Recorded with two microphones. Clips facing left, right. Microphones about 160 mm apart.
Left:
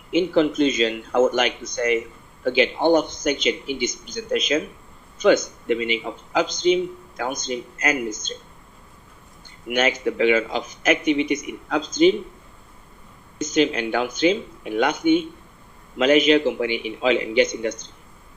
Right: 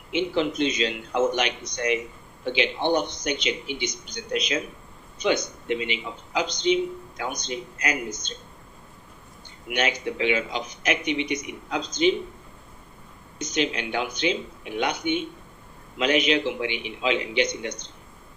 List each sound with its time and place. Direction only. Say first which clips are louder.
0.1 s a man's voice: left 6 dB; 45° left (ahead or behind)
9.6 s a man's voice: left 5 dB; 45° left (ahead or behind)
13.4 s a man's voice: left 6 dB; 45° left (ahead or behind)